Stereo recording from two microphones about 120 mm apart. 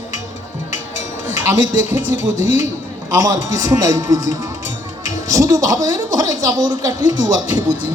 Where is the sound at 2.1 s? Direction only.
70° left (ahead or behind).